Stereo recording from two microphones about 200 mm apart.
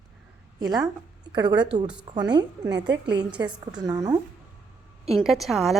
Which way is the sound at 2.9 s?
60° right (ahead or behind).